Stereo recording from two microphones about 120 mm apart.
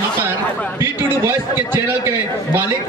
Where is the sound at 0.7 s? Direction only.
20° right (ahead or behind).